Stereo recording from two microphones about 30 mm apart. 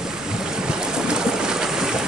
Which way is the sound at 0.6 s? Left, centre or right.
Right.